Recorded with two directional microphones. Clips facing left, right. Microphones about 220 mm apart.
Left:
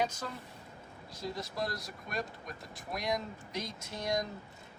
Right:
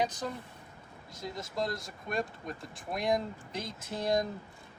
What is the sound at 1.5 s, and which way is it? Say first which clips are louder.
Speech: right 3 dB; 25° right (ahead or behind).